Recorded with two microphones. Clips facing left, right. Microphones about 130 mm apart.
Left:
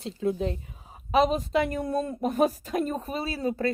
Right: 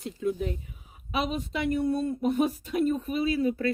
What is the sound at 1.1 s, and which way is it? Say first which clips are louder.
Speech: left 7 dB; 40° left (ahead or behind).